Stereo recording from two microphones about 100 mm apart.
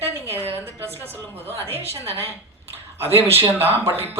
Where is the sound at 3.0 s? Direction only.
25° right (ahead or behind).